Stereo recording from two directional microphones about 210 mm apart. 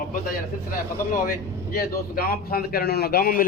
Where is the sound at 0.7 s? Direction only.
40° left (ahead or behind).